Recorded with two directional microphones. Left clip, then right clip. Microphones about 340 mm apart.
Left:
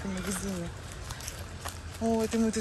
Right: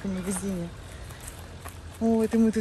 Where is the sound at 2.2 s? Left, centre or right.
Right.